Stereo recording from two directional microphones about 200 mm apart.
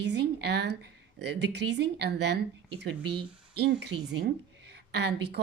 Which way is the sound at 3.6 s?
55° right (ahead or behind).